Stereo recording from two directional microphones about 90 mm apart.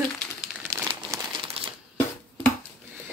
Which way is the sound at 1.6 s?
90° right.